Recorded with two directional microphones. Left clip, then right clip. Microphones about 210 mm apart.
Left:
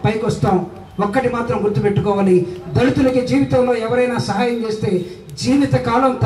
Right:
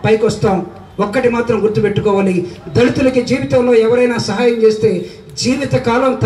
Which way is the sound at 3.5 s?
50° right (ahead or behind).